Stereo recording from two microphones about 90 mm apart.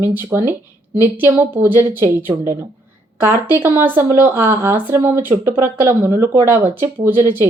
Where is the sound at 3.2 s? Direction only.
25° right (ahead or behind).